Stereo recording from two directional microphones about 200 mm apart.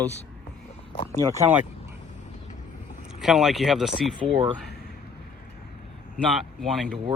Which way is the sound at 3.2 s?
Centre (ahead or behind).